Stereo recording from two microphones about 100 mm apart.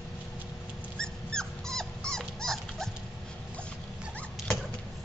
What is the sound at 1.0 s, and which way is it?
Dog, 5° left (ahead or behind).